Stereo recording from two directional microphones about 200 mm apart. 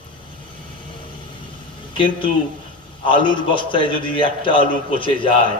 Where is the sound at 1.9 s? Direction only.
25° left (ahead or behind).